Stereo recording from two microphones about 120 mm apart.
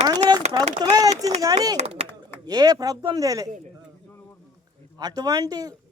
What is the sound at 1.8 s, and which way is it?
Speech, 55° right (ahead or behind).